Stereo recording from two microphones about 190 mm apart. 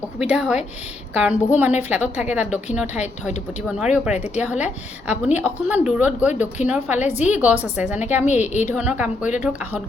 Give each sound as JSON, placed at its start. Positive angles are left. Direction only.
{"t": 0.2, "sound": "a woman's voice", "side_deg": 0}
{"t": 3.7, "sound": "a woman's voice", "side_deg": -5}
{"t": 8.3, "sound": "a woman's voice", "side_deg": 35}
{"t": 8.7, "sound": "a woman's voice", "side_deg": -5}